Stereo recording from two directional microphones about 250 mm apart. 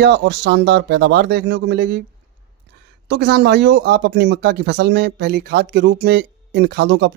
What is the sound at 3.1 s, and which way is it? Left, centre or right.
Speech, right.